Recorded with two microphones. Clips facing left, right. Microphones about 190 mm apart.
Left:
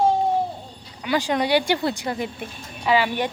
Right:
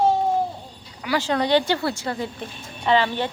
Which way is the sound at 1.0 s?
15° left (ahead or behind).